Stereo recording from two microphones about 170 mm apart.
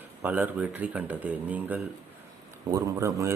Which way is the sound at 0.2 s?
10° right (ahead or behind).